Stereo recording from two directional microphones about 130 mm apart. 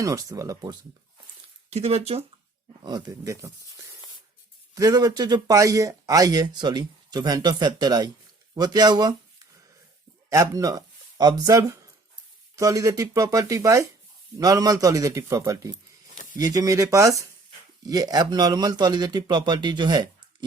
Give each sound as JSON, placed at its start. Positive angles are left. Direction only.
{"t": 0.0, "sound": "a man's voice", "side_deg": -25}
{"t": 1.7, "sound": "speech", "side_deg": -55}
{"t": 2.8, "sound": "a man's voice", "side_deg": -30}
{"t": 10.2, "sound": "a man's voice", "side_deg": -25}